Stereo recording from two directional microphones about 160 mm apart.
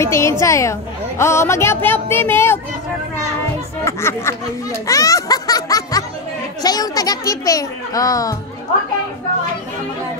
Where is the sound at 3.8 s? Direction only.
15° left (ahead or behind).